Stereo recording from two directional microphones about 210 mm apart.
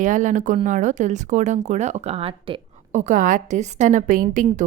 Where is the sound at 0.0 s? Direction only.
35° right (ahead or behind).